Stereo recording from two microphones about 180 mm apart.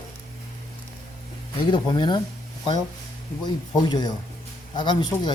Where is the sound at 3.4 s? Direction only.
25° left (ahead or behind).